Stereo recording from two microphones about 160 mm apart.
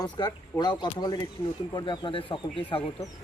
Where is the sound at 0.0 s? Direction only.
25° left (ahead or behind).